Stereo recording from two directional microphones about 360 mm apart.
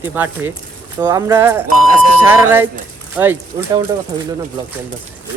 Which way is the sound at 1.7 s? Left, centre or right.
Right.